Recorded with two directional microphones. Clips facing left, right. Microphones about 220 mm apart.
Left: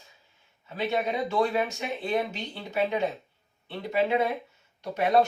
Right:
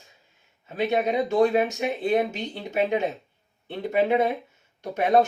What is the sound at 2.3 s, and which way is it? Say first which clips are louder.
Speech: right 4 dB; 50° right (ahead or behind).